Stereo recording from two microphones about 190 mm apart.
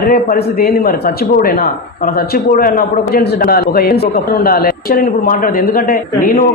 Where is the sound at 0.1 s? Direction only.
50° left (ahead or behind).